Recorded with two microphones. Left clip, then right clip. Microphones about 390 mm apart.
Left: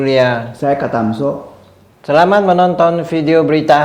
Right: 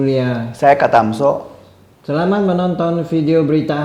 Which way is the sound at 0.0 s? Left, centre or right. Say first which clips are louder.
Left 6 dB; left.